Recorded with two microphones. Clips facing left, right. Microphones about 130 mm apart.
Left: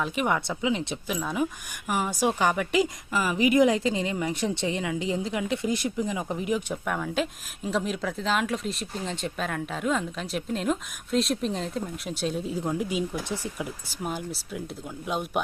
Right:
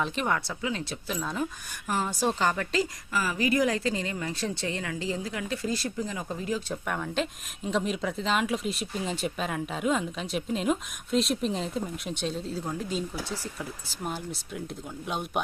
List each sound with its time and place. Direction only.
0.3 s a woman's voice: 15° left (ahead or behind)
6.8 s speech: centre (ahead or behind)